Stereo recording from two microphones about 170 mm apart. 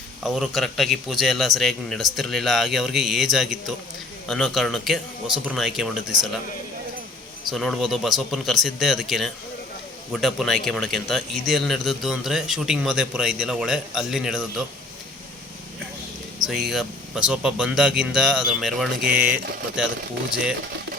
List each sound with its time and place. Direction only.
0.2 s a man's voice: centre (ahead or behind)
7.5 s a man's voice: centre (ahead or behind)
16.5 s a man's voice: centre (ahead or behind)